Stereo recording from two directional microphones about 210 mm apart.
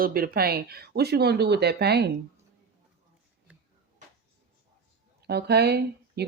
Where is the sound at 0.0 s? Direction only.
45° right (ahead or behind).